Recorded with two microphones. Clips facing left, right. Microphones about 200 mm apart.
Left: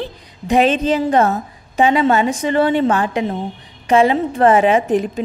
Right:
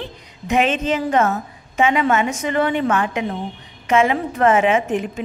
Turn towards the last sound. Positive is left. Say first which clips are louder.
# left 4 dB
turn(degrees=35)  # may be behind; listen again after turning